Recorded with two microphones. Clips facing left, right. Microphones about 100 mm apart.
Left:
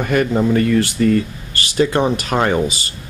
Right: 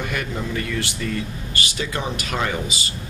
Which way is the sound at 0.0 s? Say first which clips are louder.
Left 11 dB; 45° left (ahead or behind).